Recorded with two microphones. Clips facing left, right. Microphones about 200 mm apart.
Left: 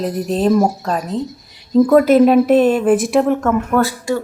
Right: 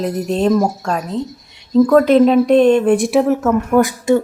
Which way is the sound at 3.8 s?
20° right (ahead or behind).